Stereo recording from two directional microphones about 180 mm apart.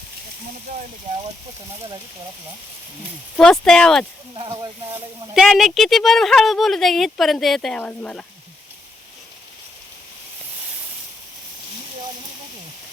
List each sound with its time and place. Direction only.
3.3 s speech: 5° left (ahead or behind)
4.4 s speech: 20° right (ahead or behind)
5.3 s speech: centre (ahead or behind)